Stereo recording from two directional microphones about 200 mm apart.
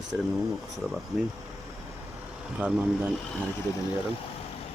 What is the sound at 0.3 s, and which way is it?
Speech, centre (ahead or behind).